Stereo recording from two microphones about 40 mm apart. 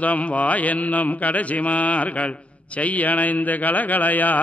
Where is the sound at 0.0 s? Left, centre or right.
Left.